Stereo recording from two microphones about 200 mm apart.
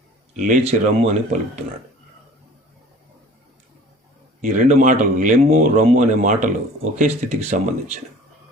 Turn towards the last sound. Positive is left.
turn(degrees=-40)  # may be behind; listen again after turning